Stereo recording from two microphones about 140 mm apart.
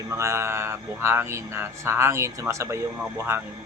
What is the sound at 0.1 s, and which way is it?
Speech, 20° right (ahead or behind).